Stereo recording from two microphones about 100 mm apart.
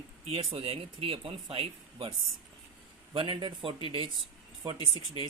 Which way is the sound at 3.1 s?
50° right (ahead or behind).